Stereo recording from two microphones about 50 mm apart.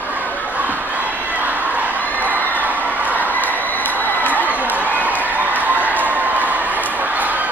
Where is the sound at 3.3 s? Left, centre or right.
Left.